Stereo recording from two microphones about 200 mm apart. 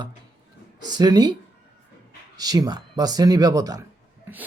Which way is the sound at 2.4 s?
20° right (ahead or behind).